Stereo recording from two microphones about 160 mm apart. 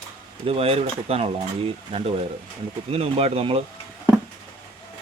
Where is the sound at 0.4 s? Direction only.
40° right (ahead or behind).